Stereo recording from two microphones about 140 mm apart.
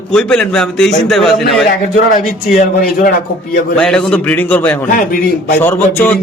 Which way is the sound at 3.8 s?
5° left (ahead or behind).